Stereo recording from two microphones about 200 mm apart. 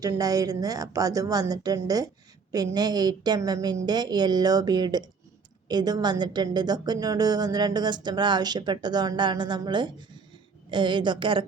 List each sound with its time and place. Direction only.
0.0 s a woman's voice: 15° right (ahead or behind)